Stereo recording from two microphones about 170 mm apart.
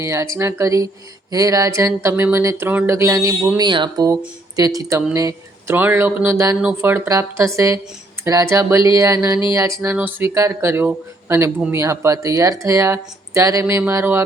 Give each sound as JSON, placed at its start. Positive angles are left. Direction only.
{"t": 0.0, "sound": "speech", "side_deg": -15}
{"t": 8.9, "sound": "a sound", "side_deg": -20}
{"t": 9.6, "sound": "speech", "side_deg": -15}